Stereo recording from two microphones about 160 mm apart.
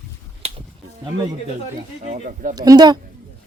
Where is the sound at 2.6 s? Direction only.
25° right (ahead or behind).